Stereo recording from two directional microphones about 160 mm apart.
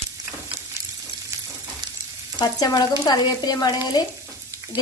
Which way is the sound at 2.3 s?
25° left (ahead or behind).